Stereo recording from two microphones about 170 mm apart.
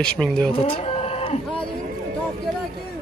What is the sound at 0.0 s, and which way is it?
Speech, 5° left (ahead or behind).